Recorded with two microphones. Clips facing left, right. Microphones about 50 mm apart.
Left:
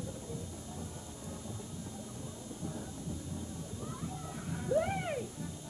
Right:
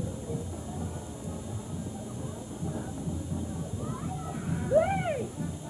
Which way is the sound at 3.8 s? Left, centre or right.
Centre.